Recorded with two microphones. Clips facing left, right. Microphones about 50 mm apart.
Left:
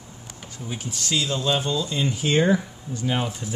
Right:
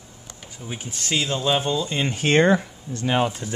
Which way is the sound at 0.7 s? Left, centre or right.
Right.